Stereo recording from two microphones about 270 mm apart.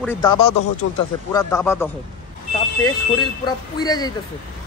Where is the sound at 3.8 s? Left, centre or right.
Centre.